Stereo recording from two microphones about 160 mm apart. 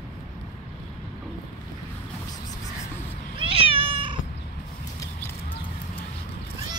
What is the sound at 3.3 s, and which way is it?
Cat, 35° right (ahead or behind).